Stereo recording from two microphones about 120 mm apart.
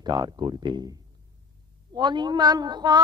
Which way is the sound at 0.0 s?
35° right (ahead or behind).